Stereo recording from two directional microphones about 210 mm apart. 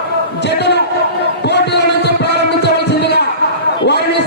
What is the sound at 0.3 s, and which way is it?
Speech, 55° left (ahead or behind).